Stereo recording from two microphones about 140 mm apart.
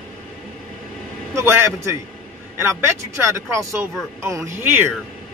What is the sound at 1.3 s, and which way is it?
A man's voice, 20° right (ahead or behind).